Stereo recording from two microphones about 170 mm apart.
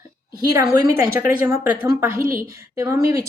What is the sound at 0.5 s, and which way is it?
A woman's voice, 20° right (ahead or behind).